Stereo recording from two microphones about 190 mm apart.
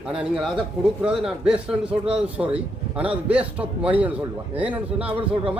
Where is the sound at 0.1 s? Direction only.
5° right (ahead or behind).